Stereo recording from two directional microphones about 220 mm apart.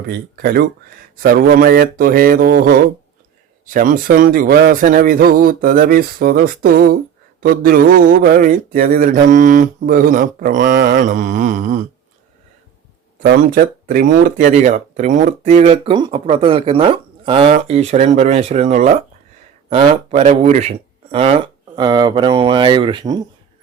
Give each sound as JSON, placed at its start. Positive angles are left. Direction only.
{"t": 0.1, "sound": "a man's voice", "side_deg": -45}
{"t": 10.8, "sound": "mantra", "side_deg": -55}
{"t": 11.0, "sound": "a man's voice", "side_deg": -35}
{"t": 13.2, "sound": "speech", "side_deg": -45}